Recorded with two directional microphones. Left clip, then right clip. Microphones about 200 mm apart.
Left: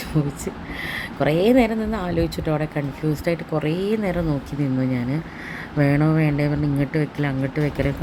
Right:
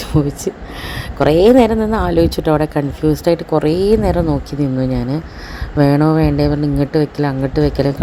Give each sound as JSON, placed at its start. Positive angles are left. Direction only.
{"t": 0.3, "sound": "a woman's voice", "side_deg": -20}